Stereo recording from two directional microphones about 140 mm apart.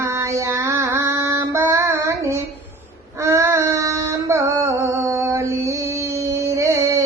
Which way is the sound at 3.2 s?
20° right (ahead or behind).